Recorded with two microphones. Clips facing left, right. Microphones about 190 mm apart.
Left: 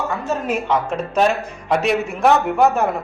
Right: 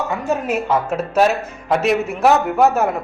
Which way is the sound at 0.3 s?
10° right (ahead or behind).